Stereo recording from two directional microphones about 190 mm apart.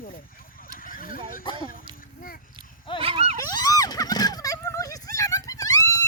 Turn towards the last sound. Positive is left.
turn(degrees=15)  # may be behind; listen again after turning